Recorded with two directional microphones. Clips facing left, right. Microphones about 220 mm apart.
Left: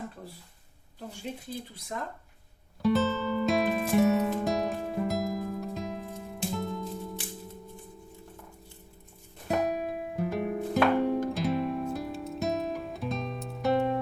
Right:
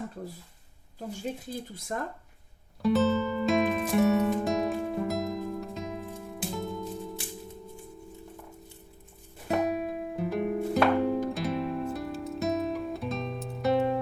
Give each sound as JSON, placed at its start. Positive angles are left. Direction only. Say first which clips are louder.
{"t": 1.7, "sound": "speech", "louder": "right 3 dB", "side_deg": -50}
{"t": 2.8, "sound": "music", "louder": "right 2 dB", "side_deg": 0}
{"t": 9.5, "sound": "music", "louder": "right 1 dB", "side_deg": 0}